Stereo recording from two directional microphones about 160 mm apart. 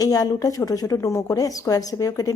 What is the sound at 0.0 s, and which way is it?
Speech, 25° left (ahead or behind).